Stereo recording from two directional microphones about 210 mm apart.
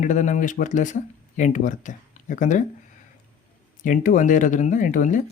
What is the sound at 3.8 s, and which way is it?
Speech, 40° left (ahead or behind).